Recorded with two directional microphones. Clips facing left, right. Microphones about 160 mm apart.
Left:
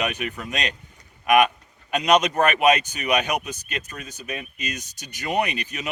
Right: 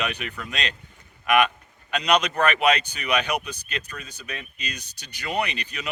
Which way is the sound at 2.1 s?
20° left (ahead or behind).